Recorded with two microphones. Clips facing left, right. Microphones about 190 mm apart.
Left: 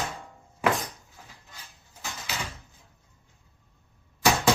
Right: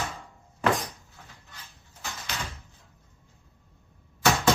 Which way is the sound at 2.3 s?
5° left (ahead or behind).